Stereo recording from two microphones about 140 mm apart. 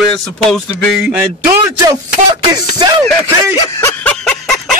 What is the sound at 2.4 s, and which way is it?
Music, 30° right (ahead or behind).